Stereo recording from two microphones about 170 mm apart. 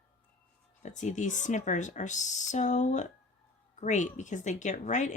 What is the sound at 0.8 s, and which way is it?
Speech, 45° left (ahead or behind).